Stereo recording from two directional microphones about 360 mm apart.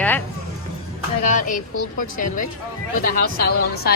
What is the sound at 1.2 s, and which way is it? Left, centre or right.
Speech, left.